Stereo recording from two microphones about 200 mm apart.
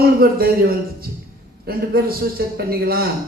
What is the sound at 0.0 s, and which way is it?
A man's voice, 50° right (ahead or behind).